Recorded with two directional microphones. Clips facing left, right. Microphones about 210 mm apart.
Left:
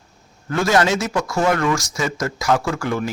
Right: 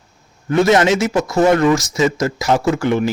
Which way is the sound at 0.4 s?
20° right (ahead or behind).